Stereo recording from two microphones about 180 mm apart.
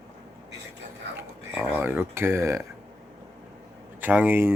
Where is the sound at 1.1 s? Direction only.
15° right (ahead or behind).